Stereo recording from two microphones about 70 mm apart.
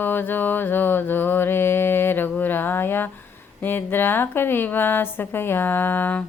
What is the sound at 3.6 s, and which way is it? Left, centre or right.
A woman's voice, left.